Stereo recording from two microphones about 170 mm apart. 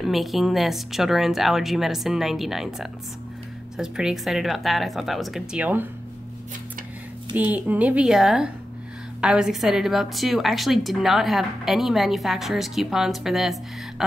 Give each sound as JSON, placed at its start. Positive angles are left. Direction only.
{"t": 0.0, "sound": "a woman's voice", "side_deg": 0}
{"t": 7.3, "sound": "a woman's voice", "side_deg": -10}